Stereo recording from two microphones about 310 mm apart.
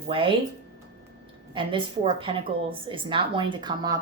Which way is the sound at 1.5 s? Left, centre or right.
Centre.